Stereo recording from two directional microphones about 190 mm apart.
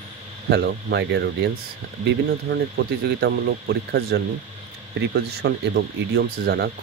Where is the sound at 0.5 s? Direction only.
65° right (ahead or behind).